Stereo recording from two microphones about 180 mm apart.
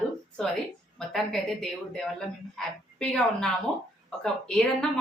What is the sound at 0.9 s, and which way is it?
A woman's voice, centre (ahead or behind).